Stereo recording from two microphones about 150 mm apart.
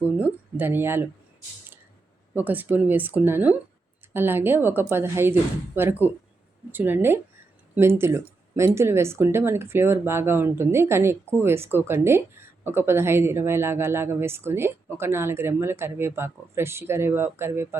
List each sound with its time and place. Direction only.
0.2 s speech: 10° right (ahead or behind)
2.3 s speech: 10° right (ahead or behind)